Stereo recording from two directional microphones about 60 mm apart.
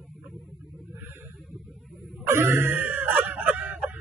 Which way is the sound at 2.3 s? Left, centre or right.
Right.